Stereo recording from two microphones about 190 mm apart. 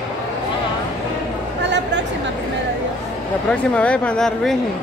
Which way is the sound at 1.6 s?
65° right (ahead or behind).